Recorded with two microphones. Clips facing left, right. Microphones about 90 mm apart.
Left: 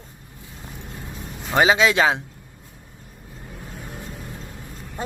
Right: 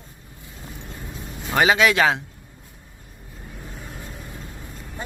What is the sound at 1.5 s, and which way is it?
Speech, 20° left (ahead or behind).